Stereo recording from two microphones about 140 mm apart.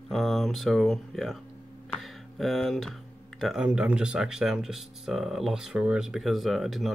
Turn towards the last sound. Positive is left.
turn(degrees=0)  # may be behind; listen again after turning